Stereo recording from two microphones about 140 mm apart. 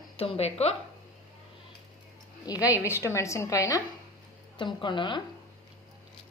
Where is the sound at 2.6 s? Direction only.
15° right (ahead or behind).